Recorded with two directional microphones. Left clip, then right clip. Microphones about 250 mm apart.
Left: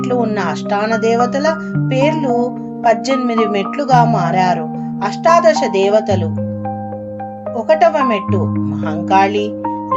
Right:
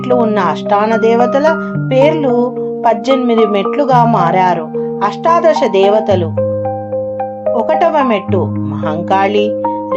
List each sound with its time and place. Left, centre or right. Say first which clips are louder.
0.1 s speech: right 7 dB; centre
7.5 s speech: even; centre